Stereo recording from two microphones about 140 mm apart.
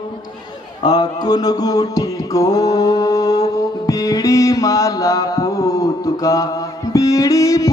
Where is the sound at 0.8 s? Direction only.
30° left (ahead or behind).